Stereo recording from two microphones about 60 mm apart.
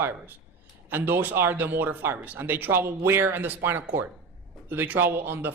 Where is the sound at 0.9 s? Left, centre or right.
Right.